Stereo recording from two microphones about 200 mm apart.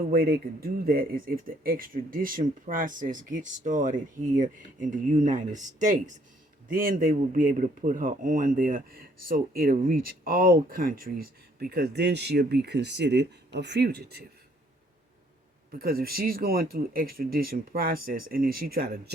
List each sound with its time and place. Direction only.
0.1 s speech: 50° right (ahead or behind)
15.7 s speech: 50° right (ahead or behind)